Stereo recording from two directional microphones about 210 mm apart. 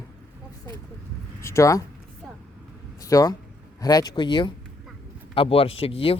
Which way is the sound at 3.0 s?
15° left (ahead or behind).